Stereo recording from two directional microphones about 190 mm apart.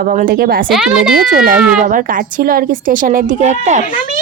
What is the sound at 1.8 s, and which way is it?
A child's voice, 45° right (ahead or behind).